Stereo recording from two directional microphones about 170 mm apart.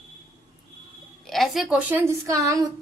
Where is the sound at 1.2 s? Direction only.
Centre (ahead or behind); by 2.7 s 20° right (ahead or behind).